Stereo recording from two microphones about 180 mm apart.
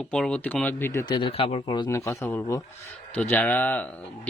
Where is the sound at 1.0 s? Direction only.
30° left (ahead or behind).